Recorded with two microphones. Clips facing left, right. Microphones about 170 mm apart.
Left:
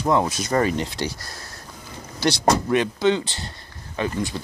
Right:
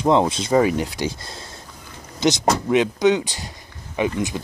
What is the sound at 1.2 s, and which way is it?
Speech, 25° right (ahead or behind).